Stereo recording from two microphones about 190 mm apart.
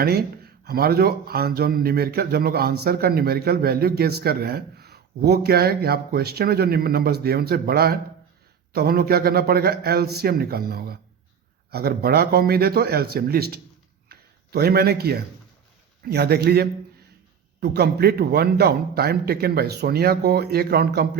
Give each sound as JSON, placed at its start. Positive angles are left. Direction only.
{"t": 0.0, "sound": "speech", "side_deg": -55}
{"t": 14.1, "sound": "a sound", "side_deg": -55}
{"t": 16.0, "sound": "speech", "side_deg": -55}